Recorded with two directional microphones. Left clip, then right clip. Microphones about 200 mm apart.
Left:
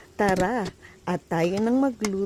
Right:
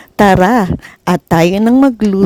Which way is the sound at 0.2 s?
45° right (ahead or behind).